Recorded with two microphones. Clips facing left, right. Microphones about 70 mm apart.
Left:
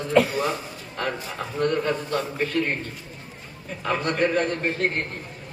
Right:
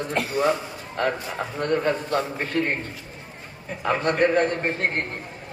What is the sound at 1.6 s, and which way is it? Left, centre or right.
A man's voice, right.